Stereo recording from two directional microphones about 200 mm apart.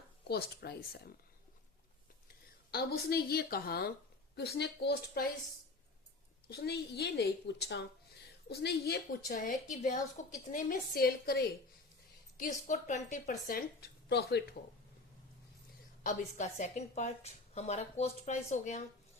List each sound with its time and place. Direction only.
0.3 s a woman's voice: 55° left (ahead or behind)
2.7 s a woman's voice: 50° left (ahead or behind)
6.5 s a woman's voice: 55° left (ahead or behind)
9.2 s a woman's voice: 40° left (ahead or behind)
16.0 s a woman's voice: 35° left (ahead or behind)